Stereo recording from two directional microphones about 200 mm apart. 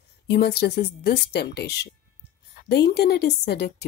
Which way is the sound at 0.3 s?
55° left (ahead or behind).